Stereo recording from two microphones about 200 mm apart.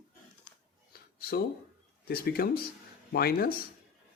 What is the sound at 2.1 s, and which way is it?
Speech, 50° left (ahead or behind).